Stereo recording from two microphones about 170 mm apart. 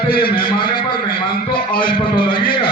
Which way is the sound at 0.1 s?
65° left (ahead or behind).